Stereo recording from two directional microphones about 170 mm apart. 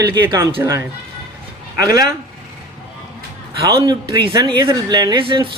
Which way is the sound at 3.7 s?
25° right (ahead or behind).